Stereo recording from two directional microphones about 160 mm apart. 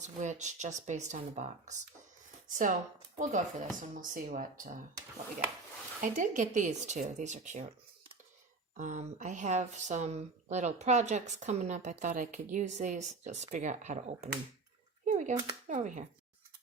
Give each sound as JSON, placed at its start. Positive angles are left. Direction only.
{"t": 0.0, "sound": "speech", "side_deg": -50}
{"t": 6.0, "sound": "speech", "side_deg": -55}
{"t": 8.7, "sound": "speech", "side_deg": -50}
{"t": 15.0, "sound": "a sound", "side_deg": -50}
{"t": 15.6, "sound": "speech", "side_deg": -50}